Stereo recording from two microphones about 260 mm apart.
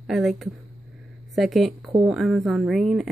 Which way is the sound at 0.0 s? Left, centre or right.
Centre.